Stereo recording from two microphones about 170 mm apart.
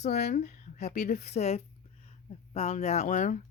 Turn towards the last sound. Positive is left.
turn(degrees=45)  # may be behind; listen again after turning